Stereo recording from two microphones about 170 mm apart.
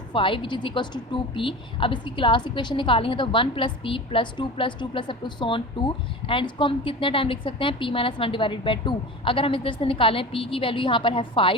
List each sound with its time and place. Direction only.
0.1 s a woman's voice: 30° left (ahead or behind)